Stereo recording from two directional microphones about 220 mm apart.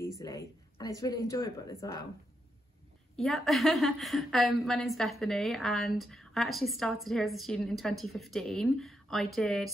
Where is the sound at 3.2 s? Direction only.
Centre (ahead or behind).